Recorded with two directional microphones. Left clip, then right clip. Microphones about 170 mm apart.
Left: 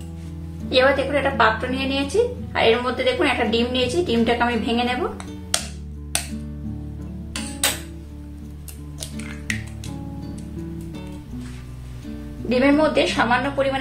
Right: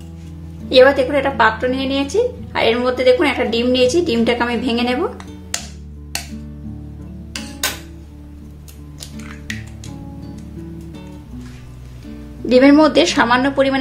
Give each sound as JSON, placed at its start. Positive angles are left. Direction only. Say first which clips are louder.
{"t": 0.7, "sound": "a woman's voice", "louder": "right 7 dB", "side_deg": -45}
{"t": 9.5, "sound": "music", "louder": "left 2 dB", "side_deg": 0}
{"t": 12.4, "sound": "a woman's voice", "louder": "right 7 dB", "side_deg": -60}